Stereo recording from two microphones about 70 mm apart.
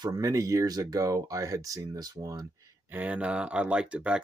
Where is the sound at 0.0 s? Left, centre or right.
Right.